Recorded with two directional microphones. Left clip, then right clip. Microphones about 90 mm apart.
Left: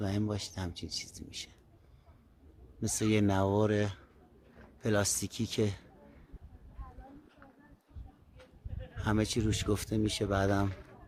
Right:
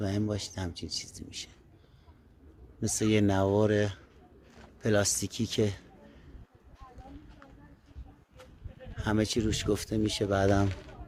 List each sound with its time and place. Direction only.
0.2 s speech: 10° left (ahead or behind)
2.8 s speech: centre (ahead or behind)
9.0 s speech: centre (ahead or behind)